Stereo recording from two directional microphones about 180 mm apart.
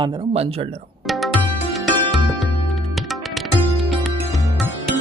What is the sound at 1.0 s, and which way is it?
Tabla, centre (ahead or behind).